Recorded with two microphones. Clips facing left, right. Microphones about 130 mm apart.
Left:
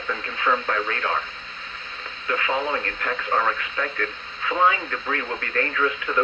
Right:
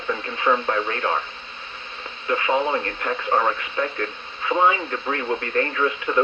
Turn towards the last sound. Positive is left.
turn(degrees=-30)  # may be behind; listen again after turning